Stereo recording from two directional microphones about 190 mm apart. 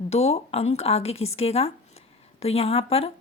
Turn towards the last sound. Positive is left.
turn(degrees=30)  # may be behind; listen again after turning